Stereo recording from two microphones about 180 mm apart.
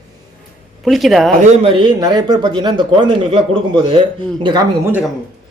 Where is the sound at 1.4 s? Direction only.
30° right (ahead or behind).